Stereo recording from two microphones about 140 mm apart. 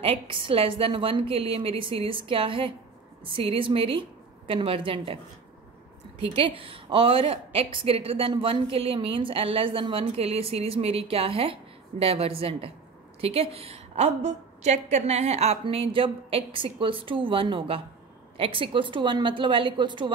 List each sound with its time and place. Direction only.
0.0 s a woman's voice: 40° right (ahead or behind)